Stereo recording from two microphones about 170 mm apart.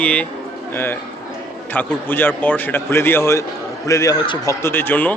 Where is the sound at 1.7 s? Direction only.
10° left (ahead or behind).